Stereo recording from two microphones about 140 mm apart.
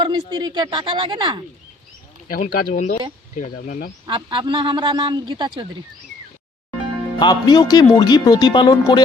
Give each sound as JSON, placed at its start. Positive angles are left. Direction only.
{"t": 0.0, "sound": "a man's voice", "side_deg": -30}
{"t": 2.4, "sound": "speech", "side_deg": 60}
{"t": 4.0, "sound": "a man's voice", "side_deg": -35}
{"t": 7.2, "sound": "speech", "side_deg": 30}